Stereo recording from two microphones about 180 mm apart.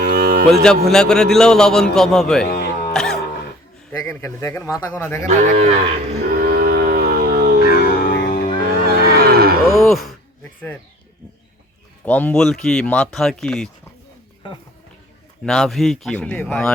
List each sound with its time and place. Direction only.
0.0 s cattle: 55° right (ahead or behind)
0.5 s speech: 5° left (ahead or behind)
2.4 s music: 65° left (ahead or behind)
2.9 s music: 5° left (ahead or behind)
4.1 s speech: 15° left (ahead or behind)
5.4 s cattle: 35° right (ahead or behind)
6.4 s music: 55° right (ahead or behind)
7.6 s music: 55° left (ahead or behind)
9.0 s moo: 60° right (ahead or behind)
9.7 s a sound: centre (ahead or behind)
12.0 s speech: 10° left (ahead or behind)
15.4 s speech: 5° left (ahead or behind)